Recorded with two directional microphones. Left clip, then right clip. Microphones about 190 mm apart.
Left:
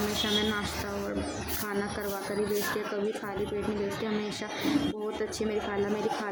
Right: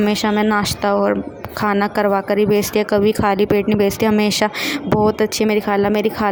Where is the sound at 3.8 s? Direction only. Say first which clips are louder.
Right 16 dB; 55° right (ahead or behind).